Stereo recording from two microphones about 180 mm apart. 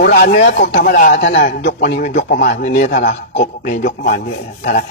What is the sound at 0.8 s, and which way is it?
Speech, 50° left (ahead or behind).